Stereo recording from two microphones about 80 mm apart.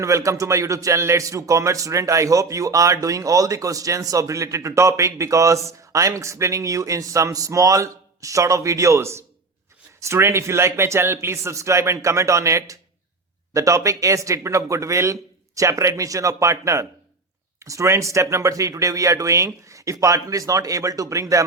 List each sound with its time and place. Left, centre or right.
0.0 s a man's voice: right